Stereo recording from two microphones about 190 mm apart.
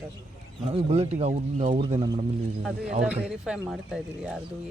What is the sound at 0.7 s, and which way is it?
Speech, 30° right (ahead or behind).